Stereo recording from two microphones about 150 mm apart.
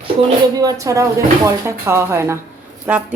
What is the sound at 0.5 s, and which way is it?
A man's voice, 25° right (ahead or behind).